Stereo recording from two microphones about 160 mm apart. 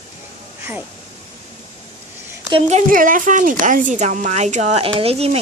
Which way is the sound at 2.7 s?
50° right (ahead or behind).